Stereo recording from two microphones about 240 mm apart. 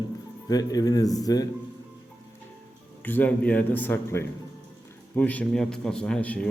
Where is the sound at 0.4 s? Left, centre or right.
Centre.